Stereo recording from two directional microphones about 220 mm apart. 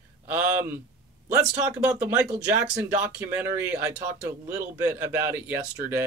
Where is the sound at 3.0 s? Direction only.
5° right (ahead or behind).